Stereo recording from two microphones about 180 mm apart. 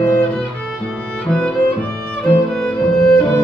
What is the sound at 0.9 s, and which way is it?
Music, 5° left (ahead or behind).